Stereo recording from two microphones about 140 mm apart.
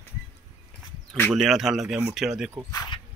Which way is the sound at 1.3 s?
Centre (ahead or behind).